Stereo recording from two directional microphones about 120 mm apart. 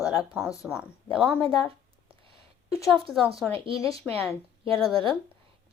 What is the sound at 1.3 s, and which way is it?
Speech, 15° left (ahead or behind).